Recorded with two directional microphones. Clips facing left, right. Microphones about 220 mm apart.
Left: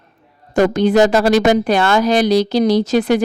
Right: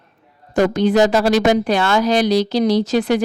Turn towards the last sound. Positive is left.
turn(degrees=50)  # may be behind; listen again after turning